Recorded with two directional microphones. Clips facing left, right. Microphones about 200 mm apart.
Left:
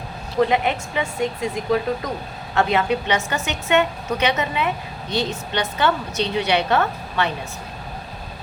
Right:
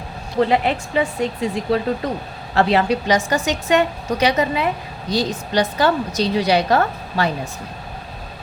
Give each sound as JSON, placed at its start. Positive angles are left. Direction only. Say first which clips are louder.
{"t": 0.5, "sound": "a woman's voice", "louder": "right 3 dB", "side_deg": -30}